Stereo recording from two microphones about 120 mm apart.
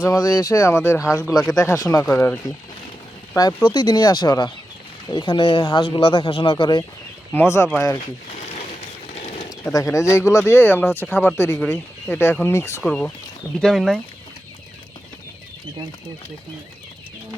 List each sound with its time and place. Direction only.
0.0 s speech: 30° left (ahead or behind)
1.2 s speech: centre (ahead or behind)
1.5 s speech: 30° left (ahead or behind)
2.0 s speech: 15° left (ahead or behind)
3.3 s speech: 35° left (ahead or behind)
7.3 s speech: 25° left (ahead or behind)
9.1 s bird: 60° left (ahead or behind)
9.9 s speech: 25° left (ahead or behind)
12.8 s speech: 10° left (ahead or behind)